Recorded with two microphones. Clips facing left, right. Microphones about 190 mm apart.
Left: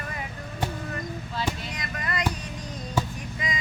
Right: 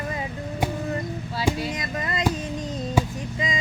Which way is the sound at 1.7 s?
25° right (ahead or behind).